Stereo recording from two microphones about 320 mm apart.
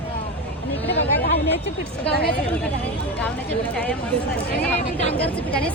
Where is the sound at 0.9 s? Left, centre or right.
Left.